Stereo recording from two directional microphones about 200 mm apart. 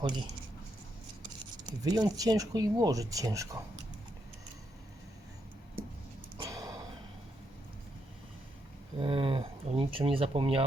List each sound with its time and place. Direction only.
1.8 s speech: 20° right (ahead or behind)
6.3 s a sound: 15° right (ahead or behind)
9.0 s speech: 25° right (ahead or behind)